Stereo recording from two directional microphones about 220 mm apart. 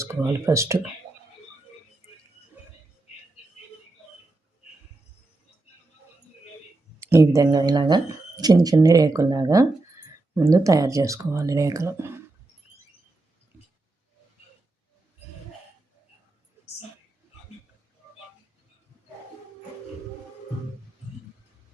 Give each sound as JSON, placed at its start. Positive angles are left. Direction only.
{"t": 0.0, "sound": "speech", "side_deg": -10}
{"t": 7.0, "sound": "speech", "side_deg": -15}